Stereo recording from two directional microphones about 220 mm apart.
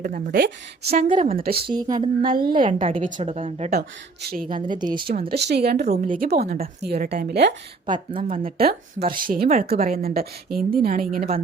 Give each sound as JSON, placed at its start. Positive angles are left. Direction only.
{"t": 0.0, "sound": "a woman's voice", "side_deg": -40}
{"t": 1.6, "sound": "a woman's voice", "side_deg": -20}
{"t": 2.2, "sound": "speech", "side_deg": -40}
{"t": 2.7, "sound": "a woman's voice", "side_deg": -30}
{"t": 3.8, "sound": "speech", "side_deg": -45}
{"t": 4.7, "sound": "a woman's voice", "side_deg": -20}
{"t": 5.3, "sound": "a woman's voice", "side_deg": -50}
{"t": 7.9, "sound": "a woman's voice", "side_deg": -25}
{"t": 8.5, "sound": "speech", "side_deg": -45}